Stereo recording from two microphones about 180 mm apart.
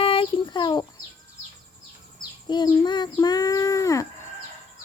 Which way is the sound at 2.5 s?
25° left (ahead or behind).